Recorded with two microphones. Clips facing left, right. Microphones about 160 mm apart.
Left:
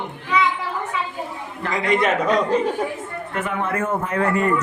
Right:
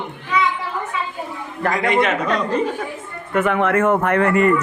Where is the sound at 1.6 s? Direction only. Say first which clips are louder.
Right 4 dB; 55° right (ahead or behind).